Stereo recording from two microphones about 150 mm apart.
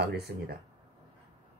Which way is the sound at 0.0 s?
90° right.